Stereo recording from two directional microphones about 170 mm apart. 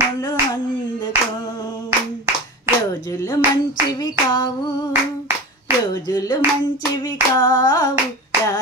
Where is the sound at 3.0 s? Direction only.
20° left (ahead or behind).